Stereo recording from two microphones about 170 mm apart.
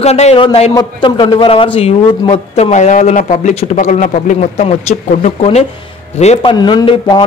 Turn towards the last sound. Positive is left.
turn(degrees=25)  # may be behind; listen again after turning